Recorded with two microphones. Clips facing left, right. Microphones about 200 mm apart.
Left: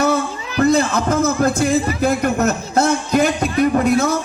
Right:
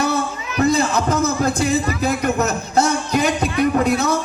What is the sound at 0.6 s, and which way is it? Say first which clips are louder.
A man's voice: left 2 dB; 55° left (ahead or behind).